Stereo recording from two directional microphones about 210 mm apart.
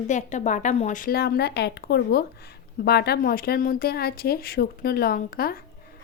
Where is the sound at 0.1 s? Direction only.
35° left (ahead or behind).